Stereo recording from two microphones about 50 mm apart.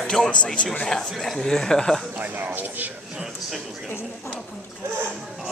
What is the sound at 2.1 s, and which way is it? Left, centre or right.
Speech, right.